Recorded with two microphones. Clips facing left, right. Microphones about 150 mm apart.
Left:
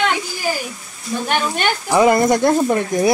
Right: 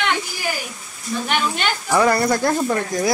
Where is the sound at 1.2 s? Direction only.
50° left (ahead or behind).